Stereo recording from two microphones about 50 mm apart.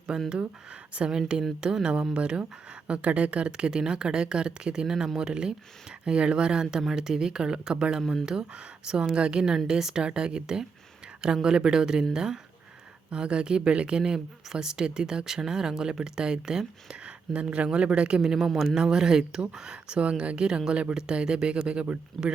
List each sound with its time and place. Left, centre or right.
0.1 s speech: centre